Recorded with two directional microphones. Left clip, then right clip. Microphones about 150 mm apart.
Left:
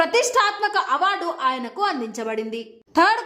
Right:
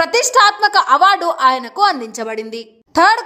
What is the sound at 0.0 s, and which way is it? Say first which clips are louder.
A woman's voice: right 7 dB; 35° right (ahead or behind).